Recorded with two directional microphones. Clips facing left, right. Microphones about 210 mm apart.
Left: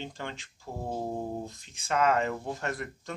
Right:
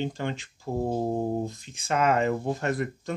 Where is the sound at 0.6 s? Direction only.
25° right (ahead or behind).